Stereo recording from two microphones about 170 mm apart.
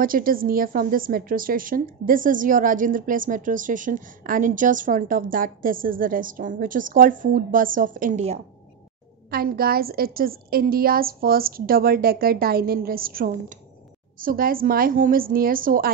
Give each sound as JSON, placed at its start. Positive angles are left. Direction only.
{"t": 0.0, "sound": "a woman's voice", "side_deg": -55}
{"t": 9.3, "sound": "a woman's voice", "side_deg": -60}